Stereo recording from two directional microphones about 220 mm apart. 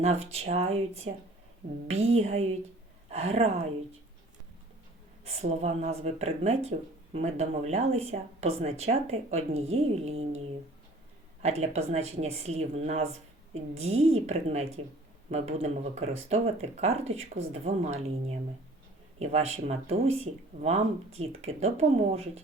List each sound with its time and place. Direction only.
0.0 s speech: 30° right (ahead or behind)
5.2 s speech: 30° right (ahead or behind)
11.4 s speech: 30° right (ahead or behind)